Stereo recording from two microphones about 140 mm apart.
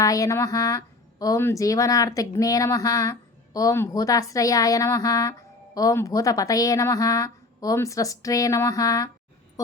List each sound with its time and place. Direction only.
0.0 s speech: 25° left (ahead or behind)